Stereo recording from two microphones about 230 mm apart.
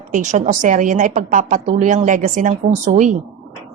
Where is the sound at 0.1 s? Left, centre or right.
Right.